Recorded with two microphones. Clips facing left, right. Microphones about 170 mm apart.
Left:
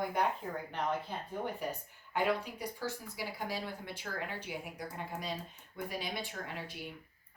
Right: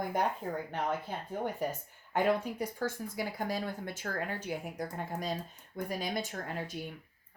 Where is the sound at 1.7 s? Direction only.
50° right (ahead or behind).